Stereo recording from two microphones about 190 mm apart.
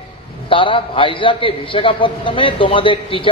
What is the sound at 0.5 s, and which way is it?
A man's voice, 25° left (ahead or behind).